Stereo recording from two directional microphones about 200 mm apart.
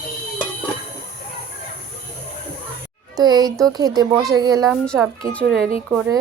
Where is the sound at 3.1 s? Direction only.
20° right (ahead or behind).